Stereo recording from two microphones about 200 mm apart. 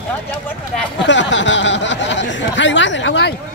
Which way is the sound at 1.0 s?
65° left (ahead or behind).